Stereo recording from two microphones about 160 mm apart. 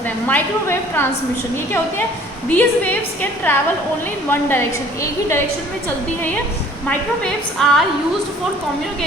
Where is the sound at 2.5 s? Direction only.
10° left (ahead or behind).